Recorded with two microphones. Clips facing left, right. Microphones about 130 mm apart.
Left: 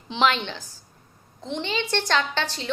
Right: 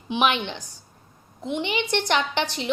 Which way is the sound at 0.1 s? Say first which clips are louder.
Even; 15° right (ahead or behind).